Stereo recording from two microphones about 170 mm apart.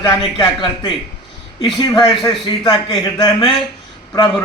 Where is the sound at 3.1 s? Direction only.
25° left (ahead or behind).